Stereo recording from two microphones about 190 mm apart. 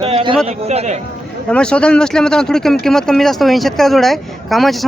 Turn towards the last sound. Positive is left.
turn(degrees=0)  # may be behind; listen again after turning